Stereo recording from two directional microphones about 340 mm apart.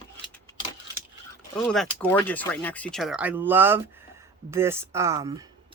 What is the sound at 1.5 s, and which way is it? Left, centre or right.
Speech, centre.